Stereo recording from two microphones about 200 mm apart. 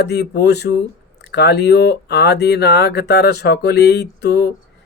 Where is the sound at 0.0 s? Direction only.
55° left (ahead or behind).